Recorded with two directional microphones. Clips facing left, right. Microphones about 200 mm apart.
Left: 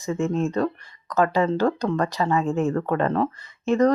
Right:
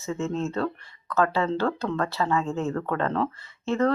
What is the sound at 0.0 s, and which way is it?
Speech, 15° left (ahead or behind).